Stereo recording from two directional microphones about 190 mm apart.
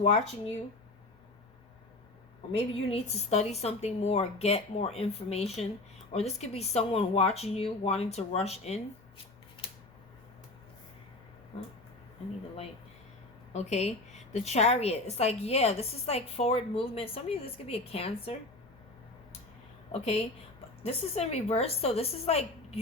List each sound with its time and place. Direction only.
0.0 s a woman's voice: 30° left (ahead or behind)
2.6 s a woman's voice: 35° left (ahead or behind)
13.5 s a woman's voice: 35° left (ahead or behind)
19.9 s a woman's voice: 35° left (ahead or behind)